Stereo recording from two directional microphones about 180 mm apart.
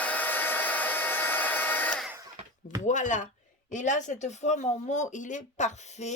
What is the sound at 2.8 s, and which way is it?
Speech, 45° left (ahead or behind).